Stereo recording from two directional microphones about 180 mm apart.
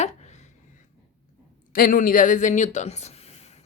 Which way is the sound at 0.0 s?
40° left (ahead or behind).